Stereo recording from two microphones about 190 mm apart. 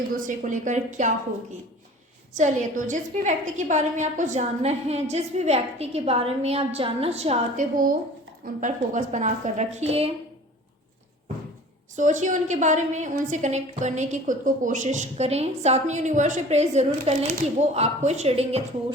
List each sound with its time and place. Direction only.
0.1 s a woman's voice: 40° right (ahead or behind)
2.3 s a woman's voice: 40° right (ahead or behind)
11.9 s a woman's voice: 40° right (ahead or behind)